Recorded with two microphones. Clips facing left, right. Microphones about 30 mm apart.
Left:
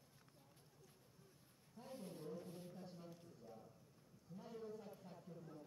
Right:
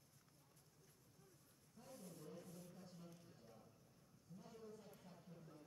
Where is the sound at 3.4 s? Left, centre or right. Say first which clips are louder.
Left 6 dB; centre.